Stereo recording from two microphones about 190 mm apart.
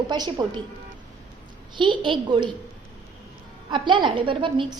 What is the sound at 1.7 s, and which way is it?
Speech, 25° right (ahead or behind).